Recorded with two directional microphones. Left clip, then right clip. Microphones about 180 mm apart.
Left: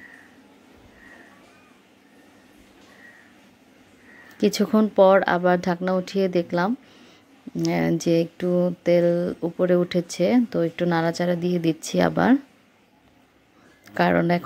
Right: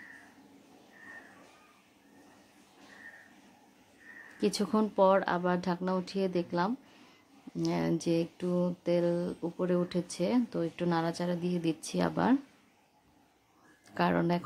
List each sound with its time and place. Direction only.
4.4 s speech: 15° left (ahead or behind)
13.8 s speech: 15° left (ahead or behind)